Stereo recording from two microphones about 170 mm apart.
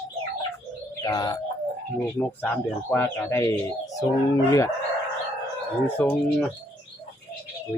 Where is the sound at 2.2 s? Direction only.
10° left (ahead or behind).